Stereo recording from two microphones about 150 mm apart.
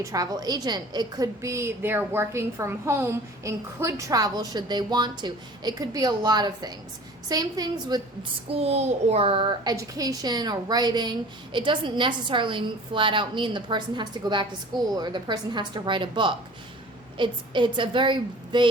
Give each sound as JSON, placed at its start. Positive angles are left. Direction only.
{"t": 0.0, "sound": "a woman's voice", "side_deg": -25}
{"t": 8.4, "sound": "a woman's voice", "side_deg": -45}